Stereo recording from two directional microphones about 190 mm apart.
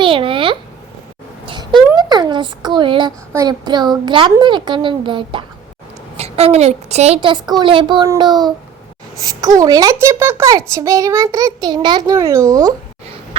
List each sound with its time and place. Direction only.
0.0 s babbling: 25° right (ahead or behind)
1.5 s a sound: 25° right (ahead or behind)
3.3 s a child's voice: 20° right (ahead or behind)